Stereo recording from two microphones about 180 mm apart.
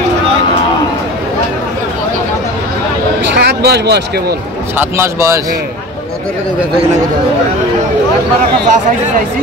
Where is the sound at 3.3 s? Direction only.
65° right (ahead or behind).